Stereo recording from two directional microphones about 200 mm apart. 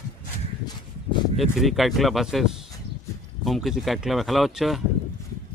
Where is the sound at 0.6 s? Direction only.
20° left (ahead or behind).